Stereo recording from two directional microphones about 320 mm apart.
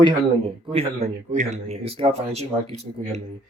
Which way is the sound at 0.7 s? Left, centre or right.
Centre.